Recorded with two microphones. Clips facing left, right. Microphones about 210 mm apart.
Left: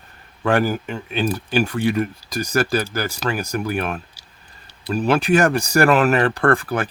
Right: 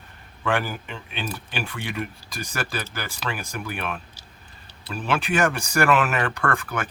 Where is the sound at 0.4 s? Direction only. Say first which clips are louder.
Left 7 dB; 40° left (ahead or behind).